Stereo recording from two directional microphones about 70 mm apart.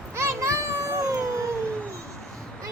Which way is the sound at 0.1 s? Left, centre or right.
Right.